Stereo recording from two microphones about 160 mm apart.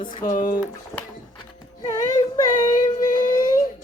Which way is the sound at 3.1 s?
55° left (ahead or behind).